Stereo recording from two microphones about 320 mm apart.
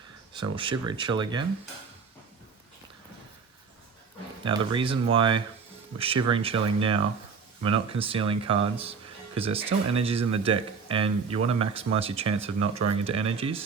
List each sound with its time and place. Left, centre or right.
0.3 s speech: centre
4.4 s speech: centre